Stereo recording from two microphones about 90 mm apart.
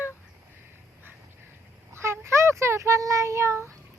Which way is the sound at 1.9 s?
30° right (ahead or behind).